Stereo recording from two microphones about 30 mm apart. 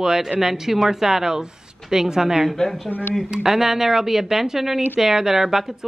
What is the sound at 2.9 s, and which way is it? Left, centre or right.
Speech, right.